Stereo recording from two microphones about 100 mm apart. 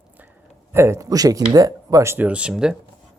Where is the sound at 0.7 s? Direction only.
25° right (ahead or behind).